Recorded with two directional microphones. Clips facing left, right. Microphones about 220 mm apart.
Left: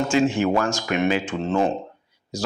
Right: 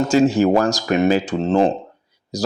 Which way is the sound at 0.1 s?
40° right (ahead or behind).